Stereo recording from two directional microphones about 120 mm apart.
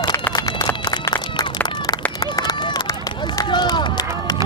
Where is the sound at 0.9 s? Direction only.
35° left (ahead or behind).